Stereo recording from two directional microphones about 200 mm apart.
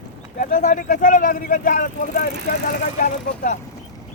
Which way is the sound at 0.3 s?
40° left (ahead or behind).